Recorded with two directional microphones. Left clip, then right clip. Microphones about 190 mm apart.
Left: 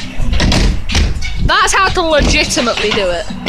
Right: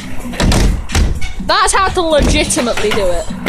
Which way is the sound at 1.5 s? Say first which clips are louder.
Left 1 dB; centre (ahead or behind).